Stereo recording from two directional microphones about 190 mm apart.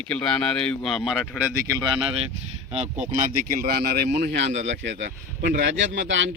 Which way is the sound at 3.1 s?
45° right (ahead or behind).